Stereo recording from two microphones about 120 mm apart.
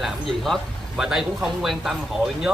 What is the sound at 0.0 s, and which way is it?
Speech, 5° right (ahead or behind).